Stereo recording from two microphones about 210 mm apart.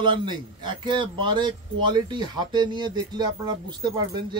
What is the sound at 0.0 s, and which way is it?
Speech, 20° right (ahead or behind).